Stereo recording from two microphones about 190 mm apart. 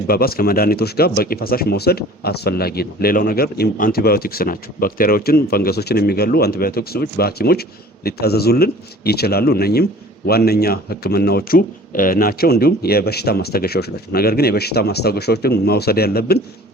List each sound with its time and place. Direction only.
0.1 s speech: 55° left (ahead or behind)